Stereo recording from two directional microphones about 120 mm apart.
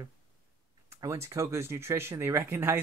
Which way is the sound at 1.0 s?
25° right (ahead or behind).